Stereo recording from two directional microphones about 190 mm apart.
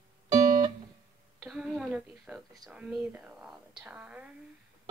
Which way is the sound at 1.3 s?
Centre (ahead or behind).